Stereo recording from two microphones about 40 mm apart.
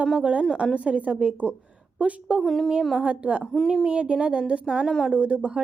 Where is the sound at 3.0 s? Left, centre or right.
Right.